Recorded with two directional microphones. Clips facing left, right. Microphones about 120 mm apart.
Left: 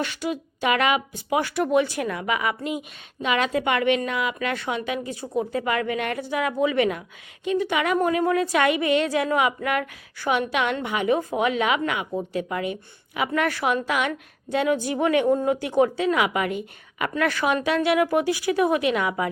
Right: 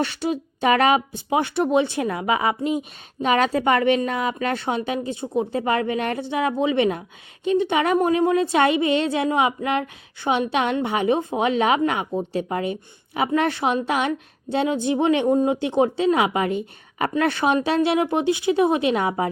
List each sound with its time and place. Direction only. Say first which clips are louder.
0.0 s a woman's voice: right 4 dB; 30° right (ahead or behind)